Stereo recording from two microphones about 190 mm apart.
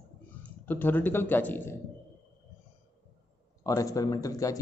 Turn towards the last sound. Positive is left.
turn(degrees=20)  # may be behind; listen again after turning